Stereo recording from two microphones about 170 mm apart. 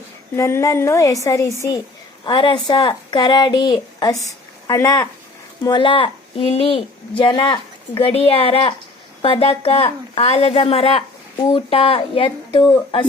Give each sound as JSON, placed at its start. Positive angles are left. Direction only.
{"t": 0.3, "sound": "a woman's voice", "side_deg": 15}
{"t": 2.2, "sound": "speech", "side_deg": 30}
{"t": 5.6, "sound": "a woman's voice", "side_deg": 30}